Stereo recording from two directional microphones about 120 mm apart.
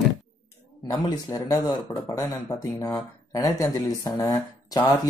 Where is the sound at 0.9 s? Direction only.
30° left (ahead or behind).